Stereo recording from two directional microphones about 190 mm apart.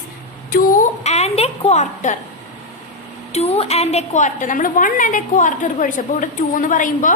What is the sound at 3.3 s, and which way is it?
A woman's voice, 35° left (ahead or behind).